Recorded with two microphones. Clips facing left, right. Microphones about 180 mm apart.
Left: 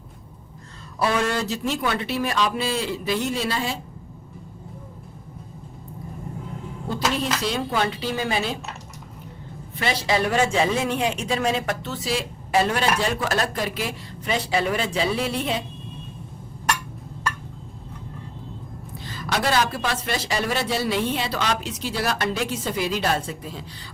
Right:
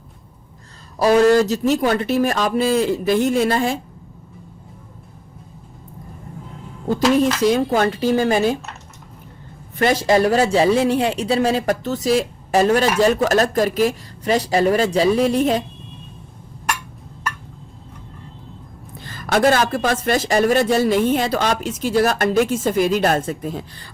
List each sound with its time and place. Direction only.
0.9 s a woman's voice: 40° right (ahead or behind)
7.4 s a woman's voice: 45° right (ahead or behind)
9.7 s a woman's voice: 45° right (ahead or behind)
18.9 s a woman's voice: 50° right (ahead or behind)